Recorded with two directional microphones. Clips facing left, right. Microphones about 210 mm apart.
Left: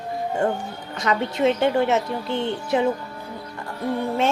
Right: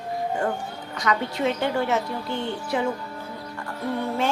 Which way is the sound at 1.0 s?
25° left (ahead or behind).